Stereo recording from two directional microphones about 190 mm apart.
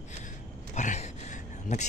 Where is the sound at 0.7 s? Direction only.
40° left (ahead or behind).